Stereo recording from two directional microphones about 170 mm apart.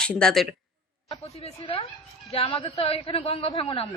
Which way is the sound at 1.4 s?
35° left (ahead or behind).